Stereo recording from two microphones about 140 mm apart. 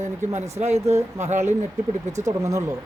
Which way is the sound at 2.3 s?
25° right (ahead or behind).